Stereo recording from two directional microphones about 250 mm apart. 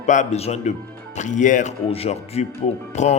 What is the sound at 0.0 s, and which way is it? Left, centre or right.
Speech, left.